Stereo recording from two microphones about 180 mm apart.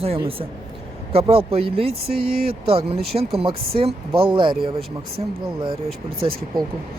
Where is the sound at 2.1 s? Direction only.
60° right (ahead or behind).